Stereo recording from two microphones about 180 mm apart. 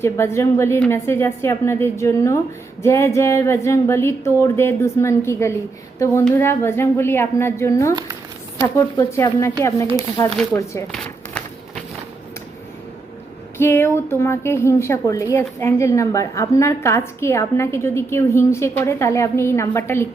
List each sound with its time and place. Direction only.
0.0 s a woman's voice: 15° left (ahead or behind)
10.9 s a sound: 5° left (ahead or behind)
13.6 s a woman's voice: 15° left (ahead or behind)